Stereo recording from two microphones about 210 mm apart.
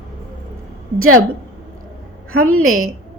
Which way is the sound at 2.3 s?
90° right.